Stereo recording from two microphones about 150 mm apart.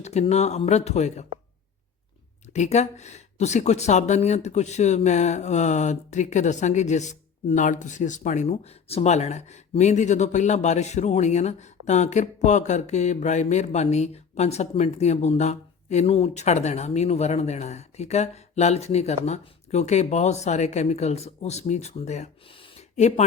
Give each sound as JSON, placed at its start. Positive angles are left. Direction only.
{"t": 0.0, "sound": "speech", "side_deg": 45}
{"t": 2.5, "sound": "speech", "side_deg": 50}
{"t": 22.4, "sound": "a sound", "side_deg": 35}